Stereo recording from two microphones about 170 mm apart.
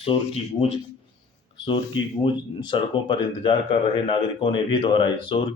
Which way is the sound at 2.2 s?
30° left (ahead or behind).